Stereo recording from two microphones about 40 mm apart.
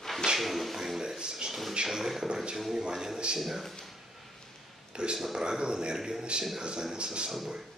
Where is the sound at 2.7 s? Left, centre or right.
Centre.